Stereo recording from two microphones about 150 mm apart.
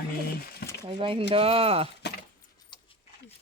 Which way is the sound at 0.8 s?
35° right (ahead or behind).